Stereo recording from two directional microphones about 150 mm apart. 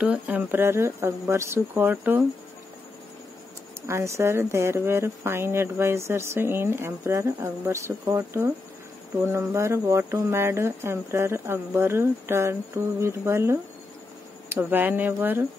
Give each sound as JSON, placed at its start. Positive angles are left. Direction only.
{"t": 0.0, "sound": "speech", "side_deg": -10}
{"t": 3.8, "sound": "speech", "side_deg": -20}